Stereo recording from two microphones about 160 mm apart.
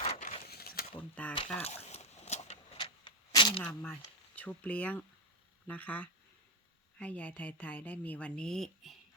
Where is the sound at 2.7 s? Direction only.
30° left (ahead or behind).